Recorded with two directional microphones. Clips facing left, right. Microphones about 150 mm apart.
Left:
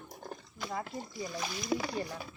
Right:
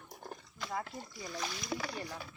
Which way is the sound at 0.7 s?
20° left (ahead or behind).